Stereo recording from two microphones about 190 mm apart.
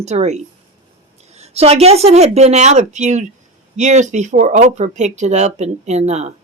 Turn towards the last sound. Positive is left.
turn(degrees=-35)  # may be behind; listen again after turning